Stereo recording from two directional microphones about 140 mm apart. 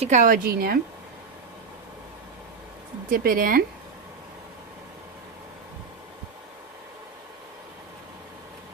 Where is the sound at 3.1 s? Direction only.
90° right.